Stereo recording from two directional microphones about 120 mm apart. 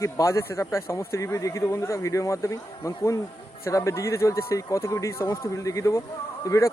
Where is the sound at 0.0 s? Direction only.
25° left (ahead or behind).